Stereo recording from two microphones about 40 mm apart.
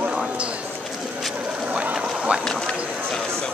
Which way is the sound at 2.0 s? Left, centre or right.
Right.